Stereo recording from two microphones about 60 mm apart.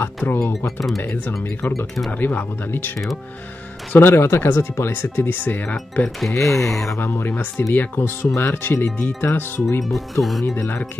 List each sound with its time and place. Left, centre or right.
0.0 s music: left
0.4 s speech: left
1.0 s speech: left
3.9 s speech: left
6.0 s speech: centre
7.0 s speech: left
10.4 s speech: left